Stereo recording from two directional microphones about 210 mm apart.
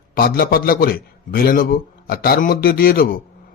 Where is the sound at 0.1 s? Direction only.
45° left (ahead or behind).